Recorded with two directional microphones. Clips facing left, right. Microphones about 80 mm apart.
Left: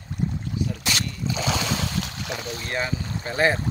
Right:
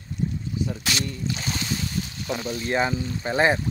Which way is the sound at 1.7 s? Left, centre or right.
Left.